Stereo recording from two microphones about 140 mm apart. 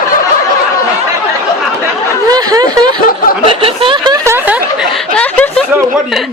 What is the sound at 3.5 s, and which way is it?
Snicker, 40° right (ahead or behind).